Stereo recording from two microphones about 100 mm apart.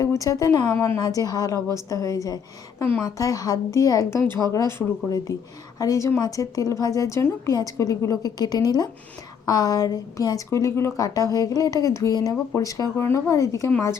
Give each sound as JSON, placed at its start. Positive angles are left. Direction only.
{"t": 0.0, "sound": "a woman's voice", "side_deg": 35}
{"t": 1.0, "sound": "a woman's voice", "side_deg": 40}
{"t": 5.3, "sound": "a woman's voice", "side_deg": 35}